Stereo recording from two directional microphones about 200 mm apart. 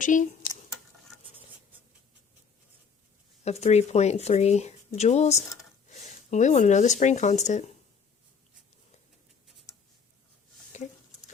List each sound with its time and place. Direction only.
0.0 s speech: 40° left (ahead or behind)
3.4 s speech: 35° left (ahead or behind)